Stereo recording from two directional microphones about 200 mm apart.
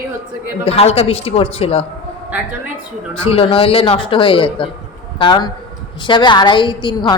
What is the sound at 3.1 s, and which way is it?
A woman's voice, 30° left (ahead or behind).